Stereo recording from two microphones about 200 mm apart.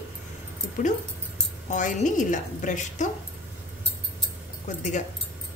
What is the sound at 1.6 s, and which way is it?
A woman's voice, 40° left (ahead or behind).